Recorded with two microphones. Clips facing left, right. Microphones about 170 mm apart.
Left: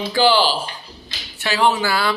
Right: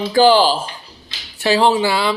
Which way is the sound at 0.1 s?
40° right (ahead or behind).